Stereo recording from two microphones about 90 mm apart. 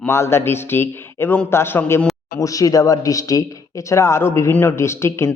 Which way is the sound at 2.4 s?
40° left (ahead or behind).